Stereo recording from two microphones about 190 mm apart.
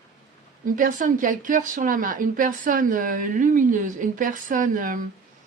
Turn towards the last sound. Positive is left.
turn(degrees=-45)  # may be behind; listen again after turning